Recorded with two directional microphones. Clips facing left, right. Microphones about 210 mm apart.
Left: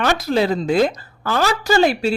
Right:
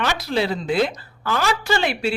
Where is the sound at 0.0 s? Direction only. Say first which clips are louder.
Left 4 dB; 45° left (ahead or behind).